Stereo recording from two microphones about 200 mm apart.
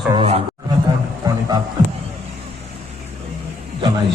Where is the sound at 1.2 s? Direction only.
15° right (ahead or behind).